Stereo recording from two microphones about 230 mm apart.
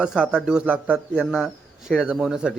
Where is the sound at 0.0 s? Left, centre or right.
Centre.